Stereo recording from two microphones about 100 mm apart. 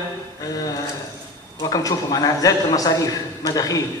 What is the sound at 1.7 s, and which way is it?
A man's voice, 40° left (ahead or behind).